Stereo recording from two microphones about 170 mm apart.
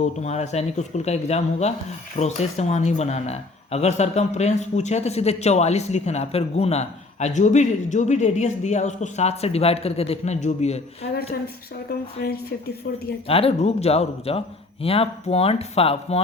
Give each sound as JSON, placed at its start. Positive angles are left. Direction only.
{"t": 0.0, "sound": "speech", "side_deg": 40}
{"t": 12.2, "sound": "a woman's voice", "side_deg": 65}
{"t": 13.2, "sound": "speech", "side_deg": 35}